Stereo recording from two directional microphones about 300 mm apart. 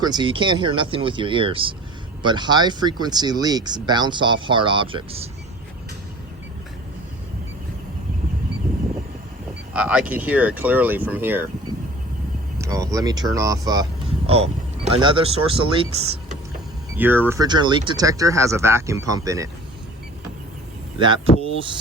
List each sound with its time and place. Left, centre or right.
0.0 s speech: centre
9.7 s speech: centre
12.5 s speech: centre
17.0 s speech: centre